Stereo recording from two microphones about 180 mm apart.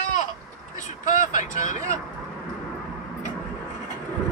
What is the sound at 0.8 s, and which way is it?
Speech, 45° left (ahead or behind).